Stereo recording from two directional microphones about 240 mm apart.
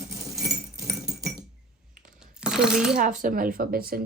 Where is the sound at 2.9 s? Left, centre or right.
Right.